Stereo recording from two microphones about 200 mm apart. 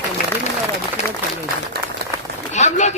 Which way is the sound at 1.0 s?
15° left (ahead or behind).